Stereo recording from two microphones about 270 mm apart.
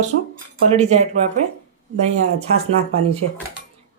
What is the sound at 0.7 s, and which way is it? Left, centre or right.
Speech, right.